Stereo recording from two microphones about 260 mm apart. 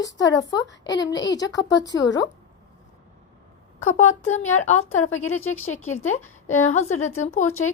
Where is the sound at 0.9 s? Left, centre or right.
Centre.